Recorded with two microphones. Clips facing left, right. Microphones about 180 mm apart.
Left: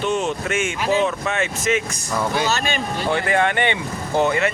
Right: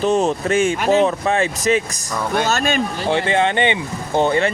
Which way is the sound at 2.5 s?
50° right (ahead or behind).